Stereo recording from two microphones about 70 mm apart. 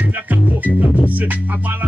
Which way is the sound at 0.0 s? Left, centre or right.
Right.